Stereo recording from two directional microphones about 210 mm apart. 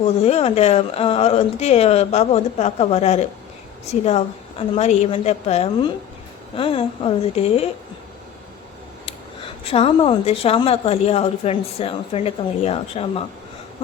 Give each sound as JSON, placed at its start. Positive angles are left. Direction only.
{"t": 0.2, "sound": "speech", "side_deg": 30}
{"t": 9.0, "sound": "speech", "side_deg": 30}